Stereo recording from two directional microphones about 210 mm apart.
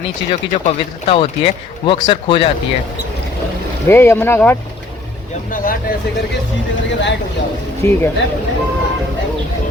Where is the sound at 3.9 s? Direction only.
10° left (ahead or behind).